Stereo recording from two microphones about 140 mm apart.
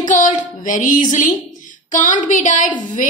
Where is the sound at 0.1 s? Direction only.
65° left (ahead or behind).